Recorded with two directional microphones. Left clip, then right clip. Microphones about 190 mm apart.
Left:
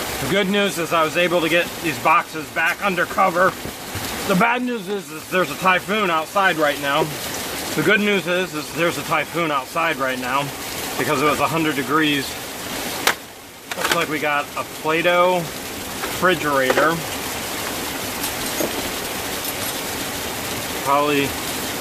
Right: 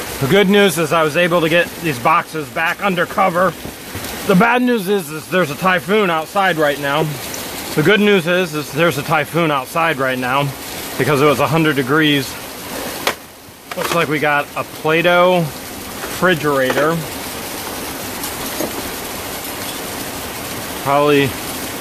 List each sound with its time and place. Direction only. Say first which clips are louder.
0.3 s speech: right 8 dB; 55° right (ahead or behind)
13.9 s speech: right 7 dB; 50° right (ahead or behind)
16.2 s speech: right 3 dB; 40° right (ahead or behind)
20.9 s speech: right 5 dB; 45° right (ahead or behind)